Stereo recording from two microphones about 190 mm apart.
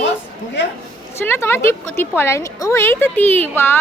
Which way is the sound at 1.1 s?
10° left (ahead or behind).